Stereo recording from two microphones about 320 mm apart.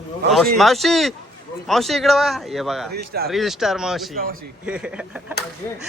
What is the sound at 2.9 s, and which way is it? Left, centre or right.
Speech, right.